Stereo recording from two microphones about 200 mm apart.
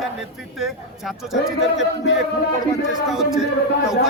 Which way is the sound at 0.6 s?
Centre (ahead or behind).